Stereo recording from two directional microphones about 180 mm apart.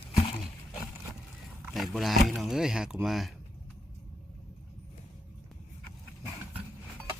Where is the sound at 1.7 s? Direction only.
Centre (ahead or behind).